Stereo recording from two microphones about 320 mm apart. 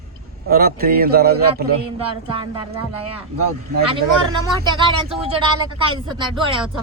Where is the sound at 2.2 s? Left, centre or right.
Centre.